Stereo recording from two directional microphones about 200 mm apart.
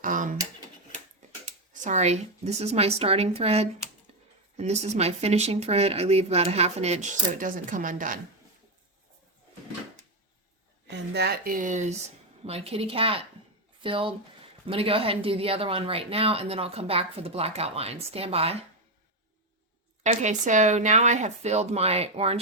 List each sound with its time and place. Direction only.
0.0 s a sound: 40° right (ahead or behind)
1.7 s speech: 40° right (ahead or behind)
10.8 s speech: 55° right (ahead or behind); by 18.5 s 30° right (ahead or behind)
20.0 s speech: 35° right (ahead or behind)